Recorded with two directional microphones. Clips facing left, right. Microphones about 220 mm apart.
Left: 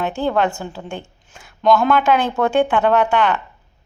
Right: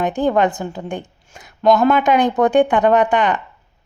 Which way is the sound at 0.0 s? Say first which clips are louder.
Right 3 dB; 15° right (ahead or behind).